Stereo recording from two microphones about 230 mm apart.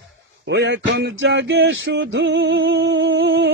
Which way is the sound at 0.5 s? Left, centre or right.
Right.